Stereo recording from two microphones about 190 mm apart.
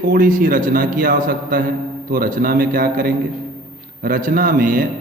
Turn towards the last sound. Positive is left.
turn(degrees=-45)  # may be behind; listen again after turning